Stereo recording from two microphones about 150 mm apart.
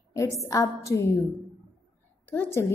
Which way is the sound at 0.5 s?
20° left (ahead or behind).